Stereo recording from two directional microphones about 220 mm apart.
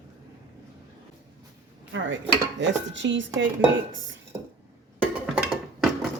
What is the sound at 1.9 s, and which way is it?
Speech, 60° right (ahead or behind).